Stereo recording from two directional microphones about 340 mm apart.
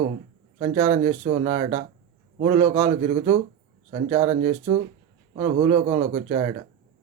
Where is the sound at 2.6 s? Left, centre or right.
Centre.